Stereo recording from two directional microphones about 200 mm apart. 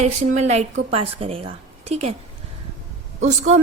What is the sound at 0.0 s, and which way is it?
A woman's voice, 35° right (ahead or behind).